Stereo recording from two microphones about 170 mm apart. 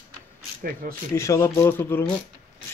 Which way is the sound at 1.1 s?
15° left (ahead or behind).